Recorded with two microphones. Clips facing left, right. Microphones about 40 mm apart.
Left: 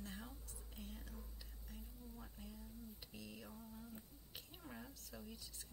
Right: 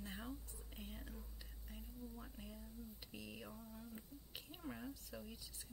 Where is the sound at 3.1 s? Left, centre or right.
Centre.